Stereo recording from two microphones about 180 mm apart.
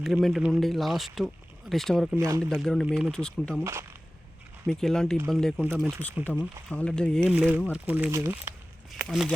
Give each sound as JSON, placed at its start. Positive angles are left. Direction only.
{"t": 0.0, "sound": "speech", "side_deg": 0}
{"t": 2.1, "sound": "speech", "side_deg": -20}
{"t": 2.4, "sound": "speech", "side_deg": 0}
{"t": 3.6, "sound": "speech", "side_deg": -15}
{"t": 4.6, "sound": "speech", "side_deg": 5}
{"t": 5.6, "sound": "speech", "side_deg": -10}
{"t": 6.7, "sound": "speech", "side_deg": 5}
{"t": 7.3, "sound": "speech", "side_deg": -5}
{"t": 8.9, "sound": "speech", "side_deg": 0}